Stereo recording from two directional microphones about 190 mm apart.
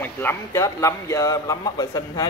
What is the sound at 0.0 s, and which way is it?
A man's voice, 10° left (ahead or behind).